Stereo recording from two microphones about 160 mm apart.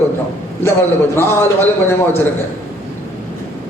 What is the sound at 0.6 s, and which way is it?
Speech, 15° left (ahead or behind).